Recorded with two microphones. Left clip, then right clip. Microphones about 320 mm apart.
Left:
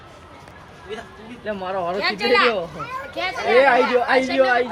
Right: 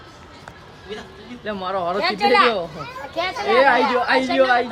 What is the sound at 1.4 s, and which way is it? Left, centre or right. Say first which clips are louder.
Speech: right 1 dB; centre.